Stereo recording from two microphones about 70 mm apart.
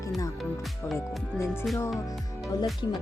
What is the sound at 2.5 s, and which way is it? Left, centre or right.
Speech, left.